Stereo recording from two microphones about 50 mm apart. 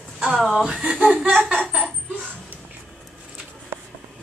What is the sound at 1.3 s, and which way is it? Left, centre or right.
Laughter, centre.